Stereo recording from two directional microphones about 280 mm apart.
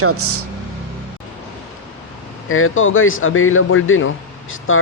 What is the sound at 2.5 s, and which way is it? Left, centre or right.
Speech, left.